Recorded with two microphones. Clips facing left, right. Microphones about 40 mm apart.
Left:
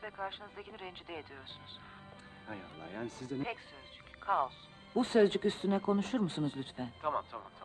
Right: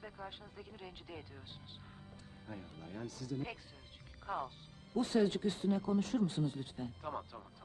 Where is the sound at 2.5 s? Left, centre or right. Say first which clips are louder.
Left 4 dB; left.